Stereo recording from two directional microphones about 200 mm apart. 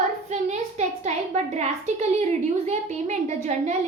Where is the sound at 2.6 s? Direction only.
35° right (ahead or behind).